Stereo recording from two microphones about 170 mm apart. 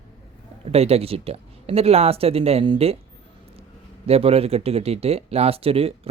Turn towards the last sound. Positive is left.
turn(degrees=-35)  # may be behind; listen again after turning